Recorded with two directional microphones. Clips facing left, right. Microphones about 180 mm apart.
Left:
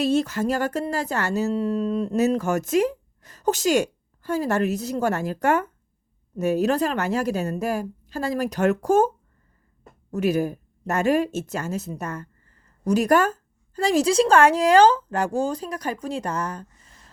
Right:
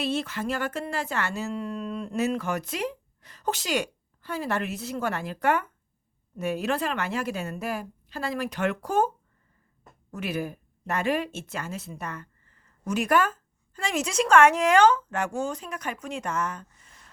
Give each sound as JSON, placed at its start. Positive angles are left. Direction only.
{"t": 0.0, "sound": "speech", "side_deg": 40}